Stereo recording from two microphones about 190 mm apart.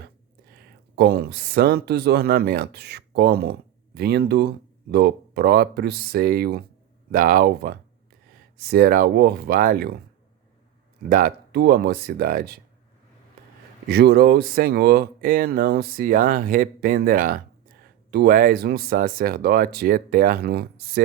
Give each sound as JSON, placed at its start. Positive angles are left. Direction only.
{"t": 0.9, "sound": "speech", "side_deg": -55}
{"t": 11.1, "sound": "speech", "side_deg": -50}
{"t": 13.8, "sound": "speech", "side_deg": -60}